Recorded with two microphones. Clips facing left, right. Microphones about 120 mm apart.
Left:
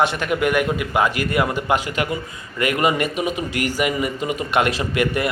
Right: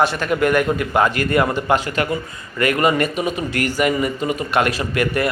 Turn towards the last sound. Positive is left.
turn(degrees=20)  # may be behind; listen again after turning